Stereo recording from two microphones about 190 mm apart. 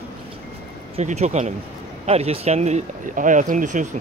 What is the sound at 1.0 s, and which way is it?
Speech, 35° right (ahead or behind).